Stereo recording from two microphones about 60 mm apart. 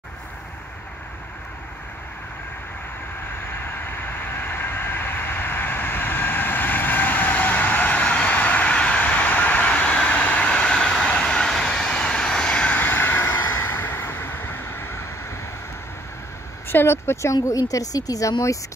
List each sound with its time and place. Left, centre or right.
3.8 s vehicle: left
16.6 s speech: left
17.3 s a woman's voice: left